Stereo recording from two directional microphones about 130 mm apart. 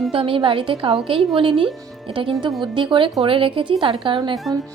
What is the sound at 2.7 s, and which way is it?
Speech, 40° right (ahead or behind).